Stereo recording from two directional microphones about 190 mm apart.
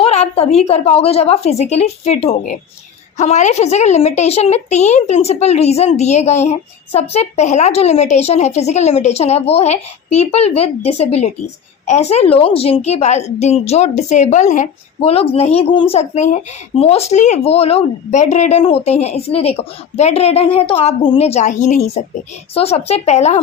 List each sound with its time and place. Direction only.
0.0 s a woman's voice: 30° left (ahead or behind)